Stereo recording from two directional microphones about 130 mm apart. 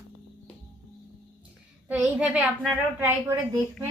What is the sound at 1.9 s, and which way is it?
A woman's voice, 10° right (ahead or behind).